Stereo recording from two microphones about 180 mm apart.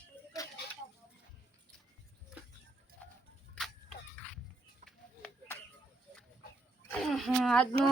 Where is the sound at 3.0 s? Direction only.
10° left (ahead or behind).